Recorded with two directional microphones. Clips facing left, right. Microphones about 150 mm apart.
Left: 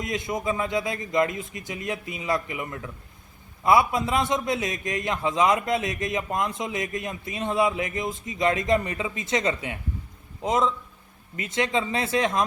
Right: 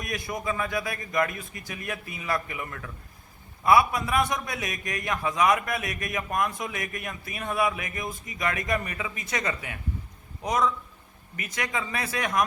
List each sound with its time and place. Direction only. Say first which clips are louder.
0.0 s a man's voice: left 4 dB; 20° left (ahead or behind)